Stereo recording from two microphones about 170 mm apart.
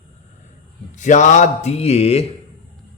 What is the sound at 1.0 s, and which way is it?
Speech, 45° left (ahead or behind).